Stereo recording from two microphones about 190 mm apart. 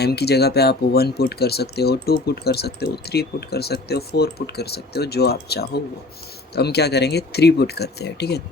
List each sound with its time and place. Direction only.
0.0 s speech: 55° left (ahead or behind)